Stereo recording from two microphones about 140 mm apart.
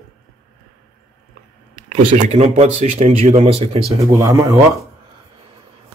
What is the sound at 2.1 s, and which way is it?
Speech, 55° right (ahead or behind).